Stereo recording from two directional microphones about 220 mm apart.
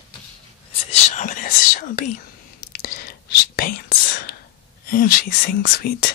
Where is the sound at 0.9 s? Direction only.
35° left (ahead or behind).